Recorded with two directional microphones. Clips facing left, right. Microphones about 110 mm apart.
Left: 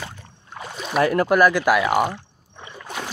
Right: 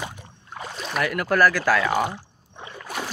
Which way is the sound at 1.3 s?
20° left (ahead or behind).